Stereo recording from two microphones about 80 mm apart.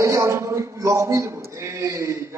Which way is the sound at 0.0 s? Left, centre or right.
Right.